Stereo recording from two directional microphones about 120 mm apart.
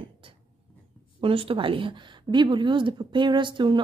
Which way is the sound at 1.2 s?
50° right (ahead or behind).